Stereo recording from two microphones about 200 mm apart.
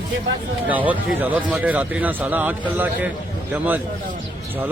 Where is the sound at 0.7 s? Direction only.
10° right (ahead or behind).